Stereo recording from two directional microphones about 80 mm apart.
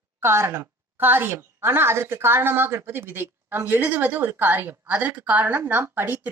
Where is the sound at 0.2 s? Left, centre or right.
Right.